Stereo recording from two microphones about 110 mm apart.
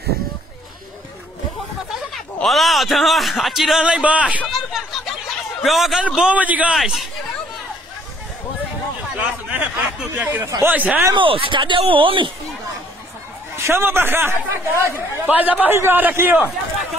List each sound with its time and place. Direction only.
2.4 s a man's voice: centre (ahead or behind)
4.5 s a sound: centre (ahead or behind)
5.6 s a man's voice: centre (ahead or behind)
6.8 s a man's voice: centre (ahead or behind)
9.1 s a sound: 15° right (ahead or behind)
10.6 s a man's voice: 15° right (ahead or behind)
11.1 s speech: 55° right (ahead or behind)
13.6 s speech: 25° right (ahead or behind)